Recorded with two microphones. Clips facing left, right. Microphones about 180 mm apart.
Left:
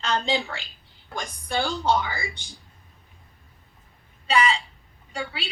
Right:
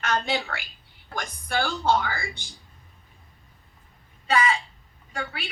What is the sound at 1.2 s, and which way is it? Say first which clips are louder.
A woman's voice: even; 15° left (ahead or behind).